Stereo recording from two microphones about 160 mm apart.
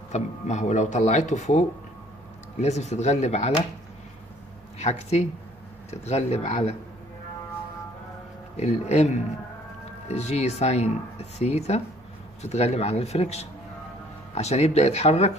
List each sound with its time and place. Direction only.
0.1 s speech: 45° left (ahead or behind)
4.7 s speech: 45° left (ahead or behind)
8.5 s speech: 45° left (ahead or behind)